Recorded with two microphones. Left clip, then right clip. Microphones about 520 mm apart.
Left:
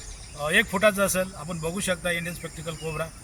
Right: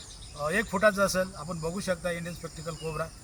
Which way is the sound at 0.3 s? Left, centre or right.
Right.